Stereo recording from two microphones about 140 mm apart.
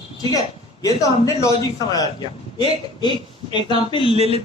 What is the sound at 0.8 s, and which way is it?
A man's voice, 25° left (ahead or behind).